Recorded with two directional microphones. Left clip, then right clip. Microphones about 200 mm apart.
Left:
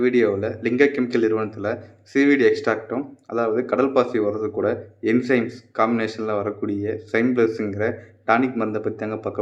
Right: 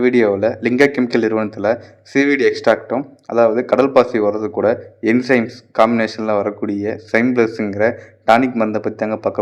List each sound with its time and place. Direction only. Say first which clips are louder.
0.0 s speech: right 5 dB; 35° right (ahead or behind)